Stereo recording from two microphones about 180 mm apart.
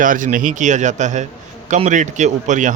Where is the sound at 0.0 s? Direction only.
45° right (ahead or behind).